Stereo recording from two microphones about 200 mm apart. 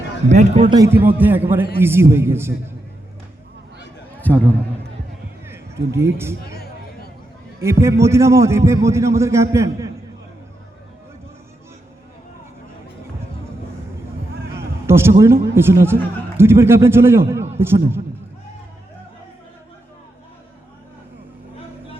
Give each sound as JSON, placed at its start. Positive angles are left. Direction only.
{"t": 0.3, "sound": "a man's voice", "side_deg": -35}
{"t": 0.7, "sound": "a man's voice", "side_deg": -15}
{"t": 4.2, "sound": "a man's voice", "side_deg": 10}
{"t": 5.5, "sound": "a man's voice", "side_deg": -15}
{"t": 7.6, "sound": "a man's voice", "side_deg": -15}
{"t": 14.8, "sound": "a sound", "side_deg": -10}
{"t": 15.2, "sound": "a man's voice", "side_deg": -10}